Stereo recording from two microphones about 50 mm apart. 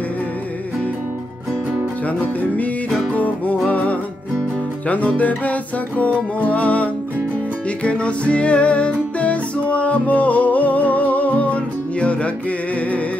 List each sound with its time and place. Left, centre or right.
2.0 s music: left